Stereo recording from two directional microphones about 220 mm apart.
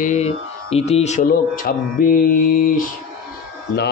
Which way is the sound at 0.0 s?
30° left (ahead or behind).